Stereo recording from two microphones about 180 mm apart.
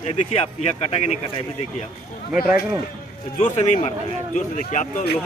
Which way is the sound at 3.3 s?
35° left (ahead or behind).